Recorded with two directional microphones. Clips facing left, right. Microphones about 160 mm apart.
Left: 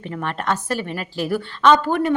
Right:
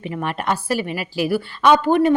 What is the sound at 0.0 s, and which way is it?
A woman's voice, 15° right (ahead or behind).